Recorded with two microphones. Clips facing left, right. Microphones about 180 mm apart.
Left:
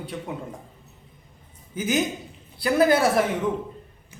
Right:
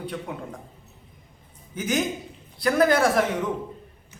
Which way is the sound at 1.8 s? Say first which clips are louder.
Left 1 dB; centre (ahead or behind).